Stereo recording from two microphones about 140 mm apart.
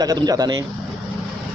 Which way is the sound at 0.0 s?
30° right (ahead or behind).